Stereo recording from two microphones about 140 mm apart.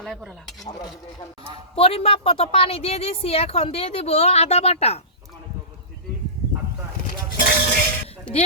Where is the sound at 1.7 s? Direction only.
45° left (ahead or behind).